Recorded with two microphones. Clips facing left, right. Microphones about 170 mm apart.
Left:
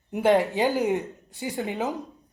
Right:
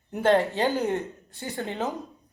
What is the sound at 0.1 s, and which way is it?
Speech, 15° left (ahead or behind).